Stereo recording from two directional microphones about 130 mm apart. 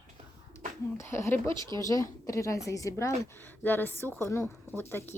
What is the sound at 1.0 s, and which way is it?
A woman's voice, 20° left (ahead or behind).